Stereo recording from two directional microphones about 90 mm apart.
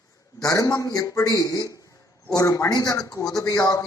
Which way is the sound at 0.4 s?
40° left (ahead or behind).